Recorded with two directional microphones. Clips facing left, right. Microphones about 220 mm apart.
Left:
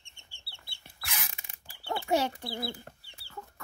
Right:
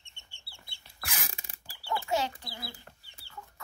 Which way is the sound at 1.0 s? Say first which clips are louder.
Right 2 dB; 40° right (ahead or behind).